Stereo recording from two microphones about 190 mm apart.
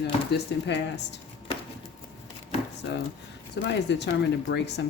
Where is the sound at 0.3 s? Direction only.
65° left (ahead or behind).